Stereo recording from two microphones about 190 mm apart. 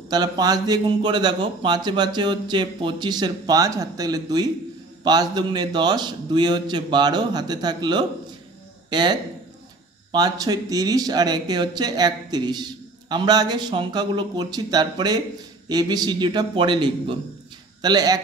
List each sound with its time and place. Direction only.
0.1 s speech: 20° right (ahead or behind)